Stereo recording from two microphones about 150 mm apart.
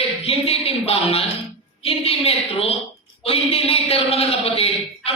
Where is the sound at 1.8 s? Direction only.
40° left (ahead or behind).